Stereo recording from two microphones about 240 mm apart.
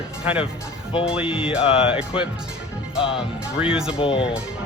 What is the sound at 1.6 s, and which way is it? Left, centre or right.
Speech, left.